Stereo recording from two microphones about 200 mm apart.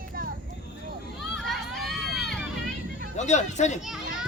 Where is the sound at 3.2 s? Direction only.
35° left (ahead or behind).